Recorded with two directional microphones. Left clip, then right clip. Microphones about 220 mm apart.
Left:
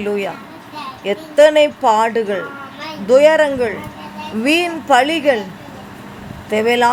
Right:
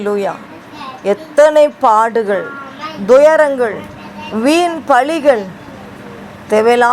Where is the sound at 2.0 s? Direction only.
50° right (ahead or behind).